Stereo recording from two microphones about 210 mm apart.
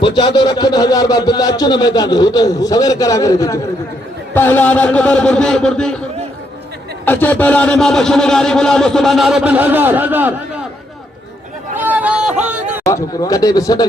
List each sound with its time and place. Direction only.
0.0 s a man's voice: 20° left (ahead or behind); by 6.0 s 5° left (ahead or behind)
7.0 s a man's voice: 10° left (ahead or behind); by 10.3 s 10° right (ahead or behind)
11.8 s a sound: 5° right (ahead or behind)
12.8 s speech: 15° left (ahead or behind)